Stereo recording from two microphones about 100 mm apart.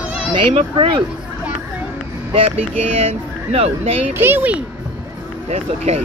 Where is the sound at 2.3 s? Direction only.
80° right.